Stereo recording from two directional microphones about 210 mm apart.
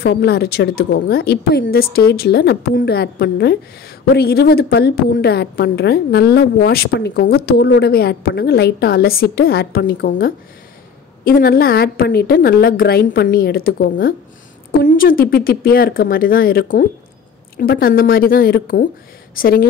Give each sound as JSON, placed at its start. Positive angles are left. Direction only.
{"t": 0.0, "sound": "a woman's voice", "side_deg": 50}